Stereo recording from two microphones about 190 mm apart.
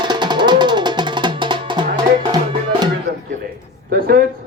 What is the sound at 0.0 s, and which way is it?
Music, 25° right (ahead or behind).